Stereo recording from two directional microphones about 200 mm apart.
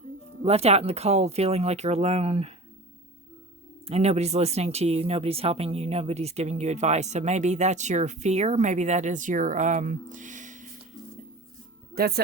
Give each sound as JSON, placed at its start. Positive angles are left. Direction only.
{"t": 0.4, "sound": "speech", "side_deg": -30}
{"t": 3.8, "sound": "speech", "side_deg": -30}
{"t": 11.9, "sound": "speech", "side_deg": -50}